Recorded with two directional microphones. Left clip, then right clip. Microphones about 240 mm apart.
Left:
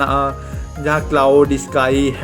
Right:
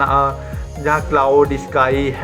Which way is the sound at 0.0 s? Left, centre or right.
Left.